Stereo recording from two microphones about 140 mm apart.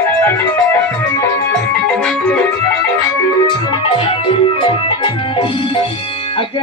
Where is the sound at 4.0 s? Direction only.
40° left (ahead or behind).